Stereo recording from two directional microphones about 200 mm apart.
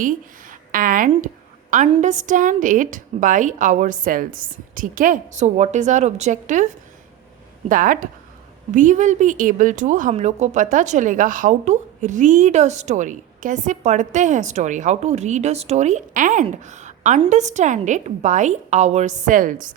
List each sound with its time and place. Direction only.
0.7 s a woman's voice: 45° right (ahead or behind)
7.7 s a woman's voice: 40° right (ahead or behind)